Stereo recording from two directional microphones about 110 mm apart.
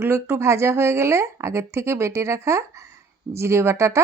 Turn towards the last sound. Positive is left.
turn(degrees=-25)  # may be behind; listen again after turning